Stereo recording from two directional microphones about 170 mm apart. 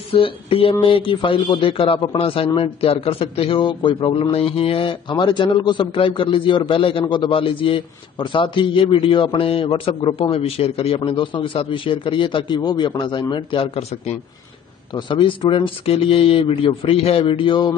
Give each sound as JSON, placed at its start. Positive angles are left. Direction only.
{"t": 0.1, "sound": "a man's voice", "side_deg": 35}